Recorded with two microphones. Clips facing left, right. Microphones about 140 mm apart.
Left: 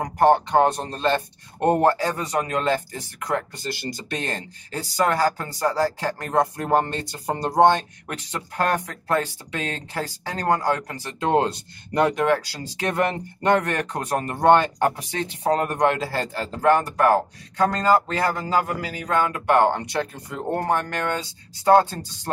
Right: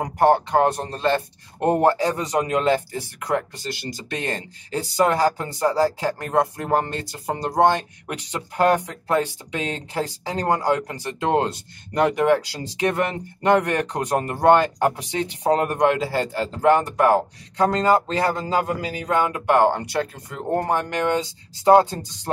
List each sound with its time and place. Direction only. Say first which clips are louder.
0.0 s a sound: even; 15° right (ahead or behind)
0.5 s speech: even; 5° right (ahead or behind)
3.5 s speech: left 1 dB; centre (ahead or behind)
4.9 s speech: right 2 dB; 20° right (ahead or behind)
11.1 s speech: left 1 dB; centre (ahead or behind)
12.2 s speech: right 3 dB; 15° right (ahead or behind)
12.9 s speech: left 1 dB; 5° right (ahead or behind)